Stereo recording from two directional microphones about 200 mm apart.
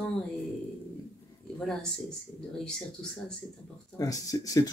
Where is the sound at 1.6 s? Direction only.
Centre (ahead or behind).